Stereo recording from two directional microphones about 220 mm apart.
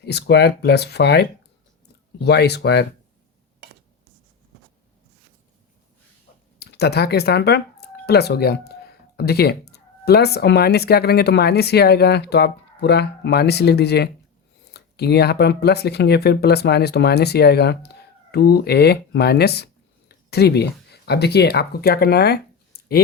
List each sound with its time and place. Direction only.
0.0 s speech: 50° left (ahead or behind)
6.6 s speech: 50° left (ahead or behind)